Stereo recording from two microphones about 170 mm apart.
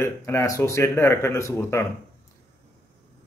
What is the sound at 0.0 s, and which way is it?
A man's voice, 15° left (ahead or behind).